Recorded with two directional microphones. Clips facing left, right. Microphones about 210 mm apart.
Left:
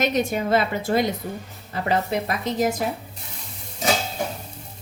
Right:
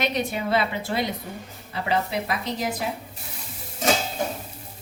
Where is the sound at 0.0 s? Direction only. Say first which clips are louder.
Left 4 dB; 45° left (ahead or behind).